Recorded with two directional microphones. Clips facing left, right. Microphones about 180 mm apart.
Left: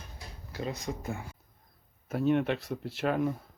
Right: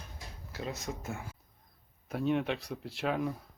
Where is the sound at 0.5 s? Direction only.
Centre (ahead or behind).